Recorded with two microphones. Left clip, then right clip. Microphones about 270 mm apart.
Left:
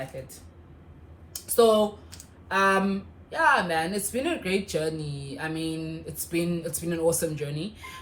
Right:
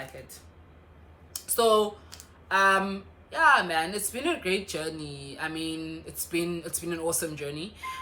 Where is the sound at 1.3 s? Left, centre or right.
Centre.